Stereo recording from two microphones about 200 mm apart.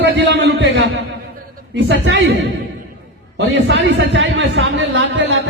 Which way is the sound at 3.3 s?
60° right (ahead or behind).